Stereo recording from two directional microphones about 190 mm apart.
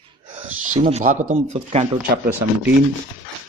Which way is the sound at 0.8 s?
35° right (ahead or behind).